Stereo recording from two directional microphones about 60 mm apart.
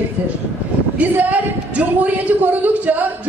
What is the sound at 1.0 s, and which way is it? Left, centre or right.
A man's voice, right.